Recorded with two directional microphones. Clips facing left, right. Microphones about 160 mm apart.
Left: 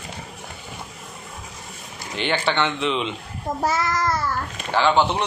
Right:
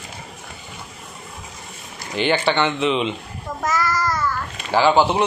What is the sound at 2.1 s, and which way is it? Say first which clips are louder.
A man's voice: right 4 dB; centre (ahead or behind).